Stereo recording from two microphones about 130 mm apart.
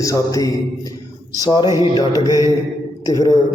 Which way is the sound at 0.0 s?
25° left (ahead or behind).